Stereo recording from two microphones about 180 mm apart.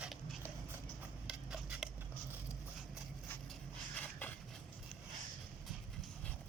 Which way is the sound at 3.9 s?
10° left (ahead or behind).